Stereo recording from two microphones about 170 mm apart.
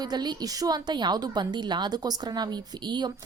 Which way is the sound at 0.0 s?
25° right (ahead or behind).